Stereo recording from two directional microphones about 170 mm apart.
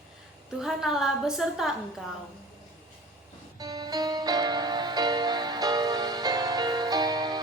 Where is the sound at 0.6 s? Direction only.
5° right (ahead or behind).